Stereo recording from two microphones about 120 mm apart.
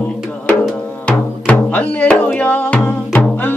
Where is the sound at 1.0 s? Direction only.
10° left (ahead or behind).